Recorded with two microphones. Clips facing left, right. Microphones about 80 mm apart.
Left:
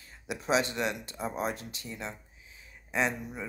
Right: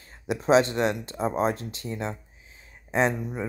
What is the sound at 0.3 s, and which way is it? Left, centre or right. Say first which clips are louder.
Speech: right 8 dB; right.